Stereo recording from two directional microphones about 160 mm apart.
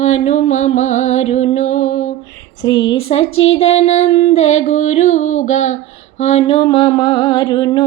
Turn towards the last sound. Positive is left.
turn(degrees=25)  # may be behind; listen again after turning